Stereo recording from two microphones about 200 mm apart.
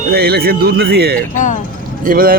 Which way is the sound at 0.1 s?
50° right (ahead or behind).